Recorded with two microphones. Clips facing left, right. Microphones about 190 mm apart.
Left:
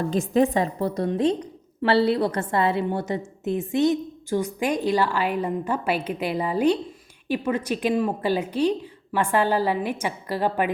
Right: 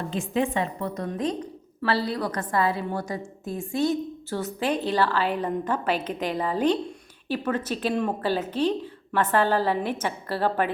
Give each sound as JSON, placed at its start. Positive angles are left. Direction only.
{"t": 0.1, "sound": "a woman's voice", "side_deg": 40}